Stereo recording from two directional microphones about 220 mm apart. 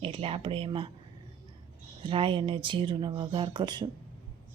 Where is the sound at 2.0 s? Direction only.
25° right (ahead or behind).